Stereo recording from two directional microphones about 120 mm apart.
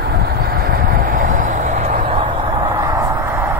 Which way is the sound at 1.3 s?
90° right.